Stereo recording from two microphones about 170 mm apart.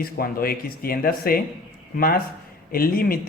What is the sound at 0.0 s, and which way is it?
Speech, 60° left (ahead or behind).